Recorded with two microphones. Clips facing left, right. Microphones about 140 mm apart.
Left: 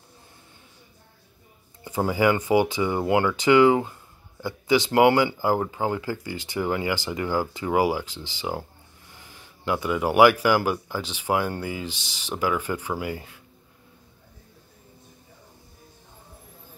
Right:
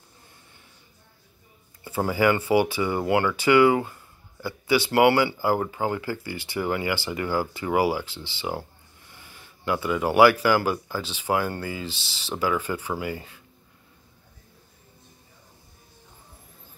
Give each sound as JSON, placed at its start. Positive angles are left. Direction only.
{"t": 1.9, "sound": "speech", "side_deg": 15}